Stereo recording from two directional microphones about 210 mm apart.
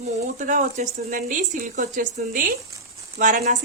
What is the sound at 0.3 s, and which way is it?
A woman's voice, 35° right (ahead or behind).